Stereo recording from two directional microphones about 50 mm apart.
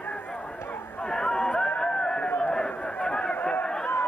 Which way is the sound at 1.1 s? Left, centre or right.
Centre.